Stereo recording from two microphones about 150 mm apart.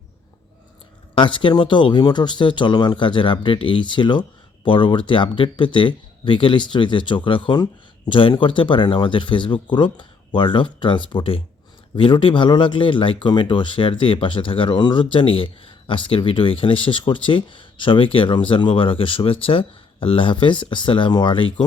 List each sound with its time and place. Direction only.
1.1 s speech: 35° left (ahead or behind)